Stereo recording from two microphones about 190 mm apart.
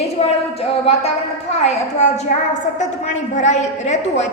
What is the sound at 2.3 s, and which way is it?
Speech, 50° left (ahead or behind).